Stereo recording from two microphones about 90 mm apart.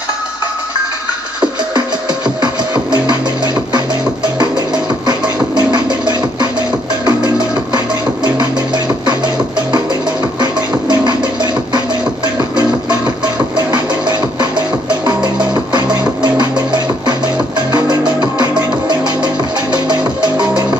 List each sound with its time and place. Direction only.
2.4 s music: 50° right (ahead or behind)
13.2 s music: 50° right (ahead or behind)
15.7 s music: 50° right (ahead or behind)